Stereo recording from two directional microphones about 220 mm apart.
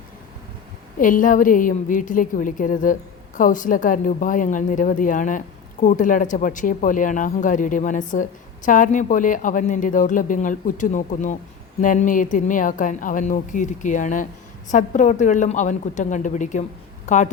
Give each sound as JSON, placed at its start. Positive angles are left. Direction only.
{"t": 0.9, "sound": "speech", "side_deg": 35}